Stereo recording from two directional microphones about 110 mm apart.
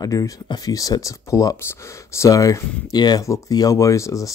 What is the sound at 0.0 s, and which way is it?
Speech, 35° left (ahead or behind).